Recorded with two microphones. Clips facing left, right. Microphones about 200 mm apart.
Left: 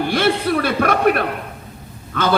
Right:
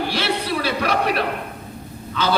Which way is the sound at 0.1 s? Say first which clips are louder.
Left 6 dB; 50° left (ahead or behind).